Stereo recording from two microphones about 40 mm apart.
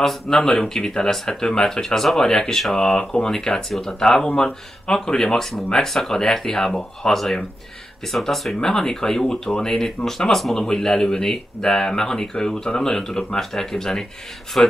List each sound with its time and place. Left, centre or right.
0.5 s speech: centre
10.7 s speech: centre
14.5 s speech: left